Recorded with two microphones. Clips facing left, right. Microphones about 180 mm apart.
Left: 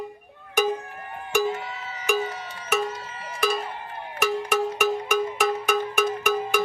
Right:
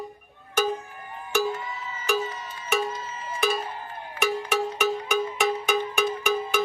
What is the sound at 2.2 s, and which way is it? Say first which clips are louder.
Cowbell: left 2 dB; 65° left (ahead or behind).